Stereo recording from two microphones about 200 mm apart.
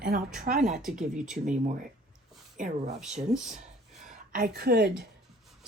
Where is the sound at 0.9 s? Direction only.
5° right (ahead or behind).